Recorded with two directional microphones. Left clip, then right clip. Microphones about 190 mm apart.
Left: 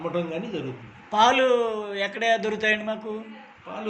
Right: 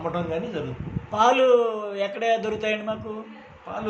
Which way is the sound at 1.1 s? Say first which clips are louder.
Right 1 dB; 5° left (ahead or behind).